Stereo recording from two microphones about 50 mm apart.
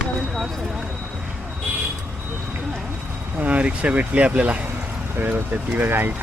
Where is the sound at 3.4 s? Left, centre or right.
Right.